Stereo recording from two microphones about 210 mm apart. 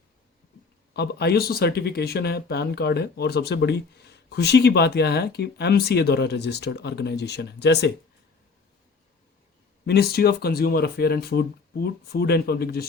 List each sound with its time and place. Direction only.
0.9 s speech: 50° left (ahead or behind)
9.8 s speech: 50° left (ahead or behind)